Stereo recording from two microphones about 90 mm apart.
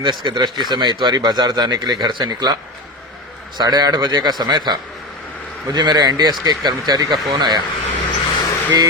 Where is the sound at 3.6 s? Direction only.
50° right (ahead or behind).